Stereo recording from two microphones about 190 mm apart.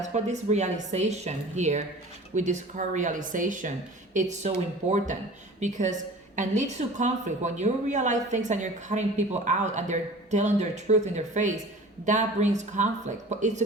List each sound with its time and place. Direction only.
0.0 s a woman's voice: 40° right (ahead or behind)